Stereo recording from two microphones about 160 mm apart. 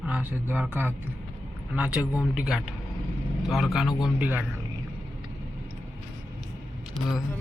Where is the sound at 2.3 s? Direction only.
5° right (ahead or behind).